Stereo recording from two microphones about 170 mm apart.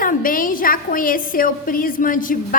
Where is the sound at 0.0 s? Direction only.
55° left (ahead or behind).